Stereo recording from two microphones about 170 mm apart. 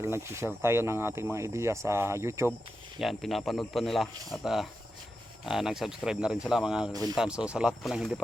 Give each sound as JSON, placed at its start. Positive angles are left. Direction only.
{"t": 0.0, "sound": "speech", "side_deg": -15}
{"t": 3.0, "sound": "speech", "side_deg": 0}
{"t": 6.9, "sound": "speech", "side_deg": -20}
{"t": 7.2, "sound": "speech", "side_deg": -5}